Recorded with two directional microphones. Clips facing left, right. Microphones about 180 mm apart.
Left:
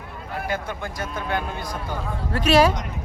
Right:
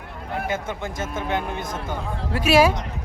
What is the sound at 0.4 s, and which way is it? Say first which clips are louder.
A man's voice: even; 20° right (ahead or behind).